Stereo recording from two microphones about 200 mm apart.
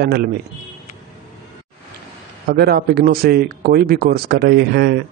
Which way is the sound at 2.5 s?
50° right (ahead or behind).